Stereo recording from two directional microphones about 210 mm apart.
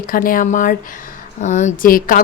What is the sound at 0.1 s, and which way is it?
Speech, 40° left (ahead or behind).